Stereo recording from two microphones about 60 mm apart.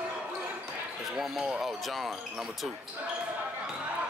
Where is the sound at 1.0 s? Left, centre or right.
Centre.